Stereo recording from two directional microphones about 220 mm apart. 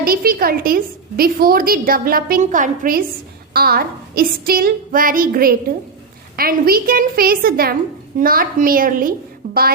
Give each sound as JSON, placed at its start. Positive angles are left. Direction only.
{"t": 0.0, "sound": "a woman's voice", "side_deg": -40}